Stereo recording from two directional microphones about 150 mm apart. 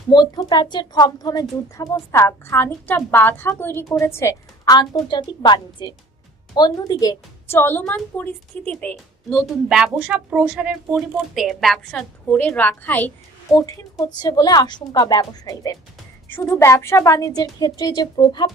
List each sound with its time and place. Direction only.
0.1 s a woman's voice: 30° left (ahead or behind)
7.6 s a woman's voice: 10° left (ahead or behind); by 18.5 s 30° left (ahead or behind)